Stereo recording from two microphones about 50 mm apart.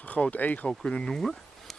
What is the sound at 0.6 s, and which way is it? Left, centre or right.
Speech, centre.